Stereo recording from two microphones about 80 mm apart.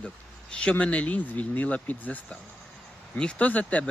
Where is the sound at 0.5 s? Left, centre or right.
Centre.